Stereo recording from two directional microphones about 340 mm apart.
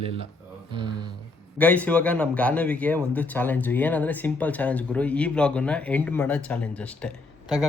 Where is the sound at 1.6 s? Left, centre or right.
Centre.